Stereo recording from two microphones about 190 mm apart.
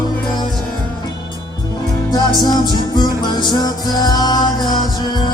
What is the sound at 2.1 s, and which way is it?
Music, 20° left (ahead or behind).